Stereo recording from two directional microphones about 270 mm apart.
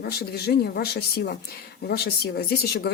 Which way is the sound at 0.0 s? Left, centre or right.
Left.